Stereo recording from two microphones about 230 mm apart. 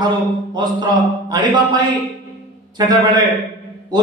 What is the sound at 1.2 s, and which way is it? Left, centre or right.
A man's voice, centre.